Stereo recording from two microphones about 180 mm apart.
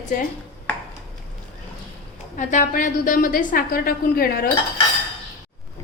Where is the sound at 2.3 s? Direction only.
45° left (ahead or behind).